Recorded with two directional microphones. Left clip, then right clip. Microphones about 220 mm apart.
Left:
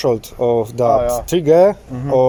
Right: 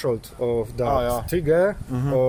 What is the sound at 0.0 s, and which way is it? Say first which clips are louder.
Speech: left 8 dB; 25° left (ahead or behind).